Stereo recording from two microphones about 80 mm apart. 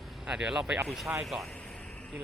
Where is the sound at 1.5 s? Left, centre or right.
Centre.